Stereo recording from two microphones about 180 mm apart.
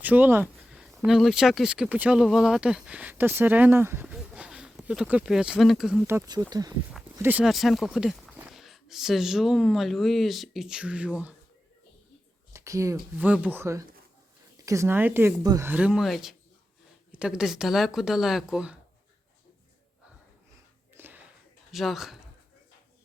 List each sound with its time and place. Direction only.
0.0 s speech: 10° right (ahead or behind)
6.1 s speech: 15° right (ahead or behind)
7.2 s speech: 10° right (ahead or behind)
12.5 s speech: 15° right (ahead or behind)
20.9 s a sound: 10° right (ahead or behind)
21.7 s speech: centre (ahead or behind)